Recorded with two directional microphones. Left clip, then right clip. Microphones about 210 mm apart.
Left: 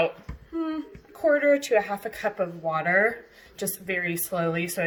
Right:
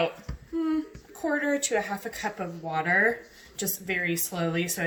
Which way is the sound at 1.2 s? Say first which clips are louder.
Left 7 dB; 30° left (ahead or behind).